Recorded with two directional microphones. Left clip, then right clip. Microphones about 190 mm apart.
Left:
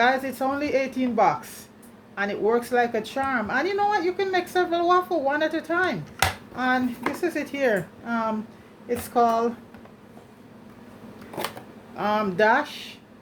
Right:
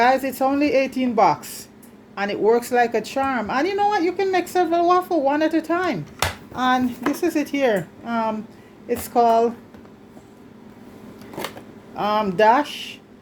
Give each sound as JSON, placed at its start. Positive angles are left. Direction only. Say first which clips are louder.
{"t": 0.0, "sound": "speech", "louder": "right 4 dB", "side_deg": -40}
{"t": 6.2, "sound": "a sound", "louder": "left 1 dB", "side_deg": 0}
{"t": 6.6, "sound": "speech", "louder": "right 4 dB", "side_deg": -40}
{"t": 11.9, "sound": "speech", "louder": "right 4 dB", "side_deg": -35}